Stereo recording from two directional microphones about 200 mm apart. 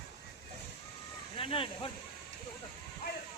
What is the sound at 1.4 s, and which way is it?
Speech, 30° left (ahead or behind).